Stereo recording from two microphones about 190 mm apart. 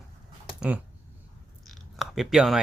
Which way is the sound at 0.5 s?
5° right (ahead or behind).